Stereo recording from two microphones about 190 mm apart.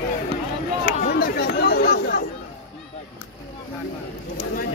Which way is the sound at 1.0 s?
50° left (ahead or behind).